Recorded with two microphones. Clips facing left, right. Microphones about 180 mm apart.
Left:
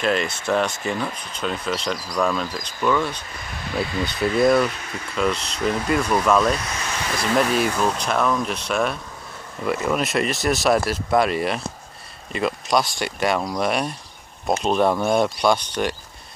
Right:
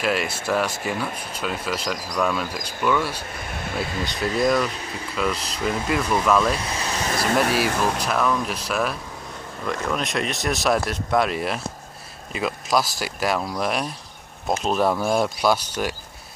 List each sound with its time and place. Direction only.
0.0 s speech: 5° right (ahead or behind)
3.4 s a sound: 55° right (ahead or behind)
4.0 s speech: centre (ahead or behind)
6.6 s vehicle: 30° right (ahead or behind)
7.5 s speech: 5° right (ahead or behind)